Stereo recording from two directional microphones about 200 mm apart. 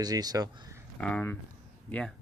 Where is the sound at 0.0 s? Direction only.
20° right (ahead or behind).